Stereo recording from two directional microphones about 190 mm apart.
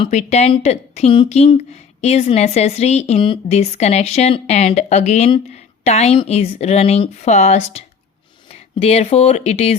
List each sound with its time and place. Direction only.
0.0 s speech: 35° left (ahead or behind)